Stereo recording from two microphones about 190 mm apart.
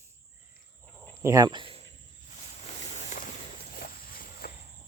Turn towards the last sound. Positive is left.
turn(degrees=50)  # may be behind; listen again after turning